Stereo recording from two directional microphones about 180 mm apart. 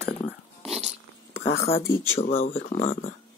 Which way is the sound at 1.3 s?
70° left (ahead or behind).